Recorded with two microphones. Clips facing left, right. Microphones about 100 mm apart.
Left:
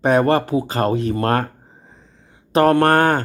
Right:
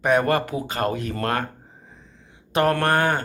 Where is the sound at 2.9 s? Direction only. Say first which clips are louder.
Left 5 dB; 45° left (ahead or behind).